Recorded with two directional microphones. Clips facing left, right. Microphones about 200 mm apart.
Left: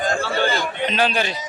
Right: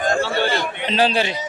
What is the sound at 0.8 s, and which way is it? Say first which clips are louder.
Speech: right 2 dB; 30° right (ahead or behind).